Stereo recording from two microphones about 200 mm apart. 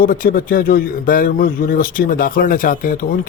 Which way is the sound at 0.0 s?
45° left (ahead or behind).